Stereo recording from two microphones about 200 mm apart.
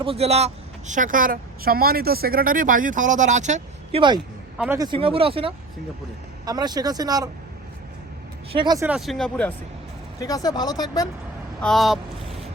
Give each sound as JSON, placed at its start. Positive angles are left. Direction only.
{"t": 0.0, "sound": "speech", "side_deg": -30}
{"t": 4.5, "sound": "speech", "side_deg": -5}
{"t": 4.8, "sound": "speech", "side_deg": -25}
{"t": 8.5, "sound": "speech", "side_deg": -20}
{"t": 8.9, "sound": "speech", "side_deg": 0}
{"t": 10.2, "sound": "speech", "side_deg": 15}
{"t": 11.6, "sound": "a sound", "side_deg": 0}